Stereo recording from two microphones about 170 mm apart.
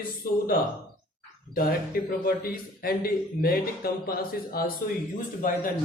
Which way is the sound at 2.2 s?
60° left (ahead or behind).